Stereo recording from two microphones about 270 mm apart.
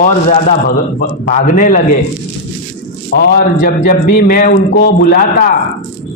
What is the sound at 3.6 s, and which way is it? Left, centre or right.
A man's voice, left.